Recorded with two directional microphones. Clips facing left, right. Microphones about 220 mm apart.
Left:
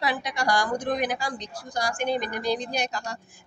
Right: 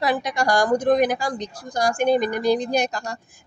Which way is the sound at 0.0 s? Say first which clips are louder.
Right 5 dB; 45° right (ahead or behind).